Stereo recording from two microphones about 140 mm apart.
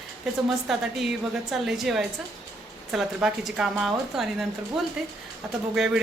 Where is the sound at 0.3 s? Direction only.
5° right (ahead or behind).